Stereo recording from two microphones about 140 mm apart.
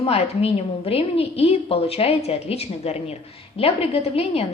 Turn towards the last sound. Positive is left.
turn(degrees=45)  # may be behind; listen again after turning